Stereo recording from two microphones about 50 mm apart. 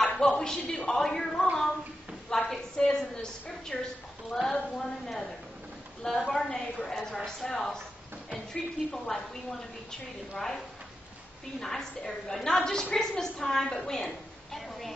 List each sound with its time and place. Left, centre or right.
0.0 s a woman's voice: centre
2.2 s a sound: centre
2.8 s a woman's voice: centre
8.9 s a woman's voice: centre
11.6 s a woman's voice: centre